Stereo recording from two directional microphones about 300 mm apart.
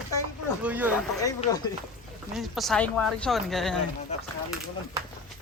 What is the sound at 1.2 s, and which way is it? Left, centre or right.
Speech, centre.